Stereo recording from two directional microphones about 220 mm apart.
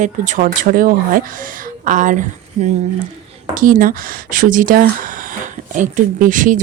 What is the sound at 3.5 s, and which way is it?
Speech, 40° right (ahead or behind).